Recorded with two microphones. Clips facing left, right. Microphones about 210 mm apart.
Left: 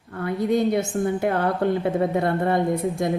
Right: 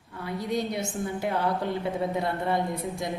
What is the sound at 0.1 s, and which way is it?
A woman's voice, 55° left (ahead or behind).